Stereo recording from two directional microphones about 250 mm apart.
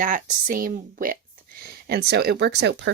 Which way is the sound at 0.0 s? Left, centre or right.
Right.